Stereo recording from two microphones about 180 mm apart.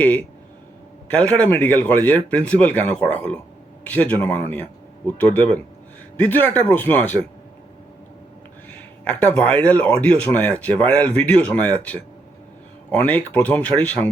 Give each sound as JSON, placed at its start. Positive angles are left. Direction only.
{"t": 0.0, "sound": "speech", "side_deg": 10}
{"t": 9.0, "sound": "speech", "side_deg": 5}
{"t": 13.0, "sound": "speech", "side_deg": 10}